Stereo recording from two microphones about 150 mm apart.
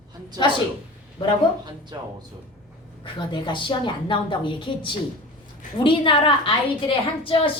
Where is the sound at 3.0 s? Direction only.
30° left (ahead or behind).